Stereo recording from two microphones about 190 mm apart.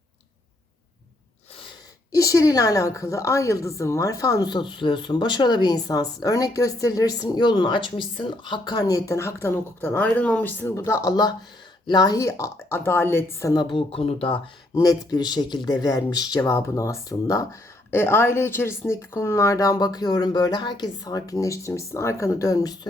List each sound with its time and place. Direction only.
2.1 s a woman's voice: 20° left (ahead or behind)